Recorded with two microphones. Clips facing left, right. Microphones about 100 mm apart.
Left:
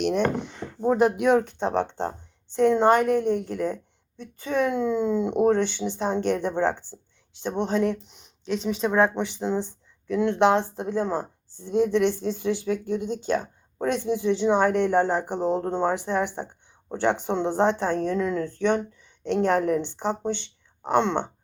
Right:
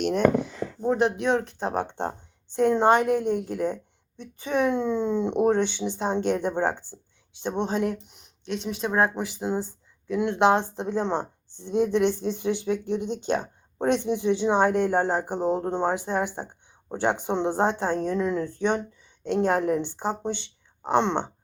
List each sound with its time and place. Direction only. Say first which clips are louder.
1.1 s speech: left 4 dB; 5° left (ahead or behind)
1.5 s speech: left 3 dB; 5° right (ahead or behind)
8.0 s speech: left 3 dB; centre (ahead or behind); by 21.2 s 20° right (ahead or behind)